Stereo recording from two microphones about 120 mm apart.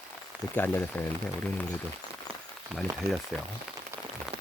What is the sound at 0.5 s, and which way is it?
Speech, 15° left (ahead or behind).